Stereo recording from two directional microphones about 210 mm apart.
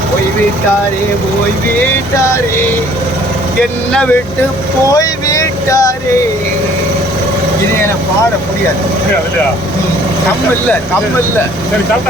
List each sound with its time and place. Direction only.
3.6 s speech: 5° left (ahead or behind)
4.9 s vehicle: 15° left (ahead or behind)